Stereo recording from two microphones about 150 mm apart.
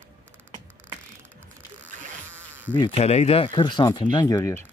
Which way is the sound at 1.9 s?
60° right (ahead or behind).